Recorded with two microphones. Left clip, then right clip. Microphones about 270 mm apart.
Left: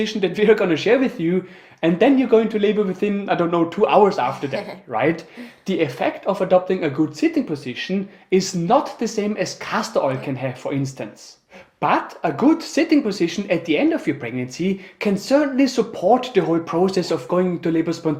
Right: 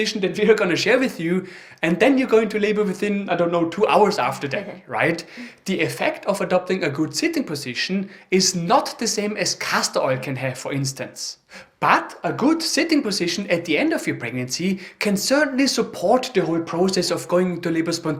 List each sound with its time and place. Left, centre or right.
0.0 s speech: centre
3.2 s speech: centre
16.4 s speech: centre